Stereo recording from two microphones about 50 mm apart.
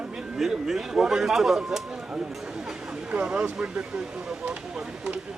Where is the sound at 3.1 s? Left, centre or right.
Right.